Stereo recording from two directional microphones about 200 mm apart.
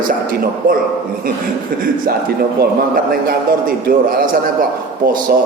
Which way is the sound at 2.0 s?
50° right (ahead or behind).